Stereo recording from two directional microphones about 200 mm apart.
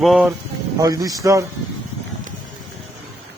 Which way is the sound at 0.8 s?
20° right (ahead or behind).